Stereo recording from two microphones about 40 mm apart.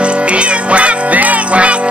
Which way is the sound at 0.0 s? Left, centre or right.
Right.